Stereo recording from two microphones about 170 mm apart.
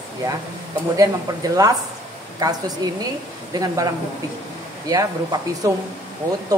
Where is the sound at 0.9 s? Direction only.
20° right (ahead or behind).